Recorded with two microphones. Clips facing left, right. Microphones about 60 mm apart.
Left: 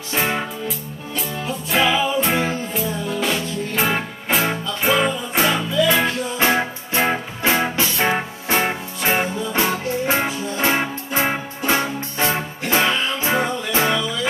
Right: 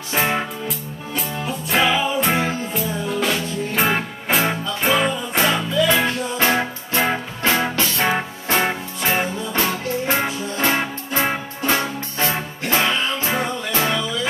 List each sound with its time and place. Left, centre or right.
0.1 s music: centre
6.4 s music: centre
10.6 s music: centre
12.3 s music: centre